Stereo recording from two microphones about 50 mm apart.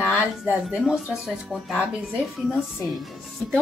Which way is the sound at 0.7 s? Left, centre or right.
Centre.